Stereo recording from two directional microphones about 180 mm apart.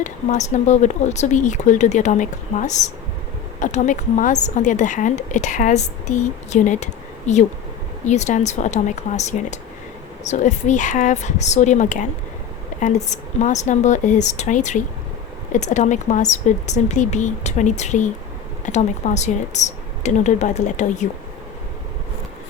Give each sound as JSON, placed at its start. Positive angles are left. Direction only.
{"t": 0.0, "sound": "a woman's voice", "side_deg": 40}